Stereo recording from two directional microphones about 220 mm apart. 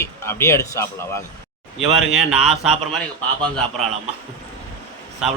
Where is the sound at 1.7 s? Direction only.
Centre (ahead or behind).